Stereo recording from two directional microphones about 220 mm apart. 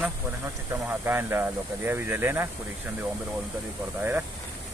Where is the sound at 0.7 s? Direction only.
10° right (ahead or behind).